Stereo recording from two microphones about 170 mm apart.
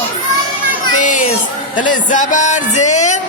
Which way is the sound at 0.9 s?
50° left (ahead or behind).